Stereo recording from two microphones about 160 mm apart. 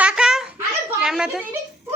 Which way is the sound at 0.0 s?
5° right (ahead or behind).